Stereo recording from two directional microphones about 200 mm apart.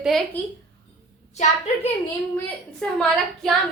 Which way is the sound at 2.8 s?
5° left (ahead or behind).